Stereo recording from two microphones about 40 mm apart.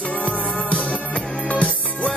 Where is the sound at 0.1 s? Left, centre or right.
Left.